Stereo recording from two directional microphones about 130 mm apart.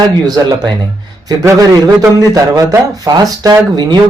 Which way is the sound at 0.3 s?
30° right (ahead or behind).